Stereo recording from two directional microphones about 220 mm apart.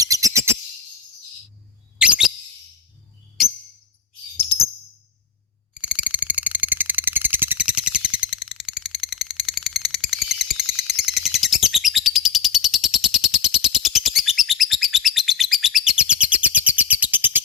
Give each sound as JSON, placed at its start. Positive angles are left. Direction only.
{"t": 0.0, "sound": "bird", "side_deg": -15}
{"t": 2.0, "sound": "bird", "side_deg": -5}
{"t": 5.7, "sound": "a sound", "side_deg": -5}